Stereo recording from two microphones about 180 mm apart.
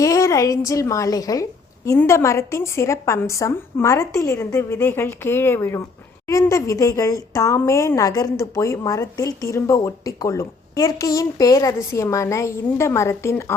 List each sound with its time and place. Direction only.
0.0 s speech: 15° left (ahead or behind)